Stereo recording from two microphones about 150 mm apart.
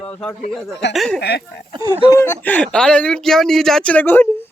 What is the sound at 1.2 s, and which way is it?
Speech, 90° left.